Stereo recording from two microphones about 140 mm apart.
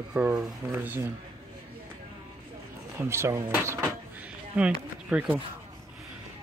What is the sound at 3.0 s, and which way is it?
Speech, 20° right (ahead or behind).